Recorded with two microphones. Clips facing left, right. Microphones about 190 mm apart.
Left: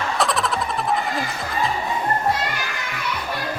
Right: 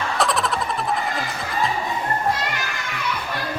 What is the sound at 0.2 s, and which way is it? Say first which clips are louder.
Music: right 1 dB; centre (ahead or behind).